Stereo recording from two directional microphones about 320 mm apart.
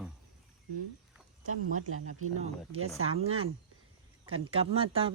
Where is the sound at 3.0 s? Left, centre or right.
Centre.